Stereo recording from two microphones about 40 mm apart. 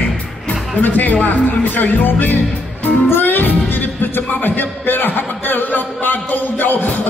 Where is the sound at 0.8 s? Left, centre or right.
Left.